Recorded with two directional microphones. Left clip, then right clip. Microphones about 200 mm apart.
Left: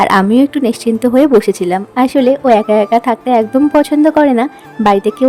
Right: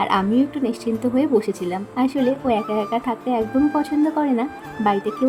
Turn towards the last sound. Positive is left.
turn(degrees=50)  # may be behind; listen again after turning